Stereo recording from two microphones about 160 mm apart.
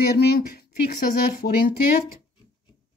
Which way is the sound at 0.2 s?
80° left.